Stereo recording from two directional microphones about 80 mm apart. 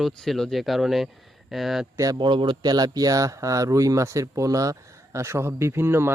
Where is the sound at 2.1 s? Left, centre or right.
Right.